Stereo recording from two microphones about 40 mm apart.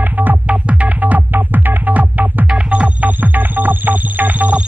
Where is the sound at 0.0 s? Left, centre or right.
Right.